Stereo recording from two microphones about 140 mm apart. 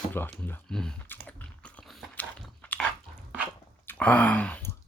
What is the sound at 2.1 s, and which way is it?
Biting, 10° left (ahead or behind).